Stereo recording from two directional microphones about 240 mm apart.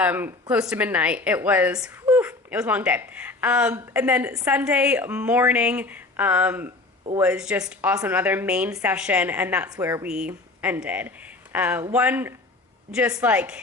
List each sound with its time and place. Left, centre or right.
0.0 s a woman's voice: centre